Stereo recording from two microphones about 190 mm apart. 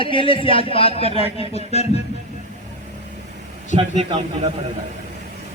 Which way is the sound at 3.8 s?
30° right (ahead or behind).